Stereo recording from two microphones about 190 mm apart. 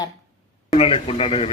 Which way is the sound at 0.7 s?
30° left (ahead or behind).